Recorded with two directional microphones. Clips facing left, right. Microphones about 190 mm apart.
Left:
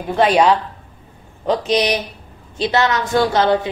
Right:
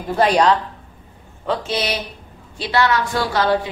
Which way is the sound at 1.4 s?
15° left (ahead or behind).